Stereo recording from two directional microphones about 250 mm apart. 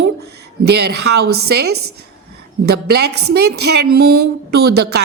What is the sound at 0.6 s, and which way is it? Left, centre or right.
A woman's voice, right.